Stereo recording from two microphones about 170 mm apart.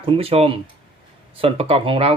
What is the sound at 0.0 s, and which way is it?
Speech, 35° right (ahead or behind).